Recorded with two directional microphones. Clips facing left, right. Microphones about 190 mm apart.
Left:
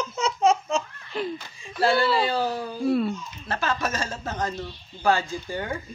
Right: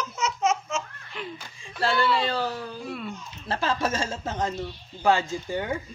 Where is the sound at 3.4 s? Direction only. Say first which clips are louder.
Right 1 dB; 30° right (ahead or behind).